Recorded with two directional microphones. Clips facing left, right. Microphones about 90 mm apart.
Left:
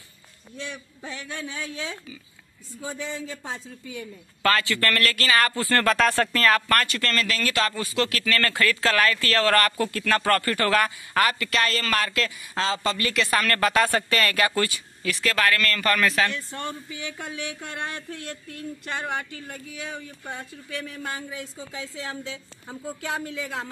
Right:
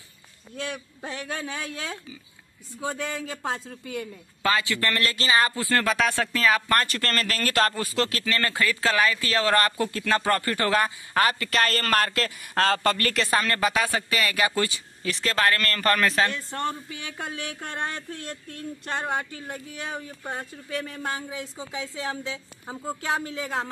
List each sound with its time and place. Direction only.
1.0 s speech: 40° right (ahead or behind); by 4.0 s 60° right (ahead or behind)
4.4 s speech: 15° right (ahead or behind)
6.9 s speech: 40° right (ahead or behind)
13.4 s speech: 15° right (ahead or behind)
15.0 s speech: 30° right (ahead or behind)
23.4 s speech: 45° right (ahead or behind)